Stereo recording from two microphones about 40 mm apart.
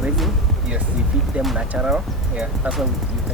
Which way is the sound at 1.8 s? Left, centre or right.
Right.